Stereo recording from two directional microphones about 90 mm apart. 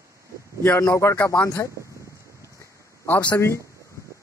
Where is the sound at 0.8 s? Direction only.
30° left (ahead or behind).